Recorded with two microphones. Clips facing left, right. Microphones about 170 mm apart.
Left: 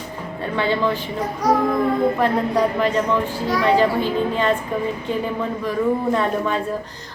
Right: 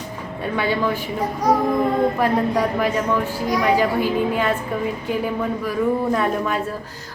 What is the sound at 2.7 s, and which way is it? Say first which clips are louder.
A woman's voice: left 1 dB; 10° right (ahead or behind).